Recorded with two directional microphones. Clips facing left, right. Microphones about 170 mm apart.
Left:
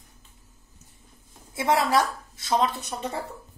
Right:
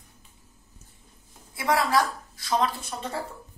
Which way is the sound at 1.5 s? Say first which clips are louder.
Left 1 dB; 25° left (ahead or behind).